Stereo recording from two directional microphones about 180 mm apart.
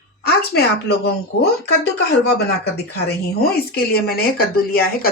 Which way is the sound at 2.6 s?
65° left (ahead or behind).